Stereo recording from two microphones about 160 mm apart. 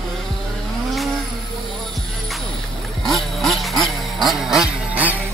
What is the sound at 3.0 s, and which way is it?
Vehicle, centre (ahead or behind).